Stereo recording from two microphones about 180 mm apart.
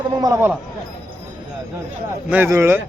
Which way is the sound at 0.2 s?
15° right (ahead or behind).